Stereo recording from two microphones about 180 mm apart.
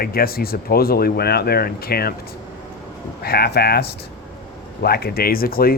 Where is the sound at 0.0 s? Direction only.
55° left (ahead or behind).